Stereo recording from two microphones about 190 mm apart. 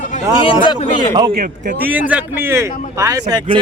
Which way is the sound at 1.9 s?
10° right (ahead or behind).